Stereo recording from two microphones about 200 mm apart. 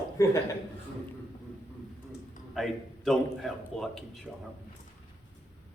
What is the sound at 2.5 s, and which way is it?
A man's voice, centre (ahead or behind).